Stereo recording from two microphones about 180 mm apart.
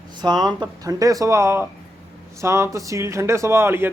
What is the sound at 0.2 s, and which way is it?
Speech, 20° right (ahead or behind).